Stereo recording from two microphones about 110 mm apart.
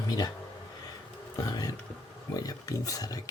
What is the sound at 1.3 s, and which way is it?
Music, 35° left (ahead or behind).